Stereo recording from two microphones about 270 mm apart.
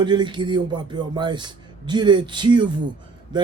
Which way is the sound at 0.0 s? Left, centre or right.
Centre.